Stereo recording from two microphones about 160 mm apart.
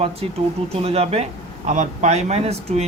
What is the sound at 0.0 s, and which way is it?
Speech, 40° right (ahead or behind).